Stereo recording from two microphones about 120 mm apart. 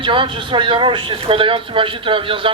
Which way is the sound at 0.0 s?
45° right (ahead or behind).